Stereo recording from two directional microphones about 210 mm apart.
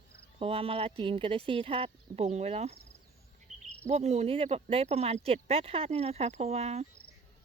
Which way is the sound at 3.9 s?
30° right (ahead or behind).